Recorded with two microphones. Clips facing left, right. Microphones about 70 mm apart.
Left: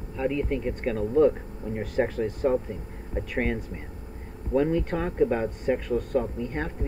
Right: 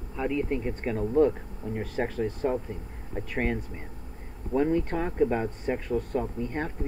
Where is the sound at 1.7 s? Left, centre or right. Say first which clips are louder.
Left 4 dB; centre.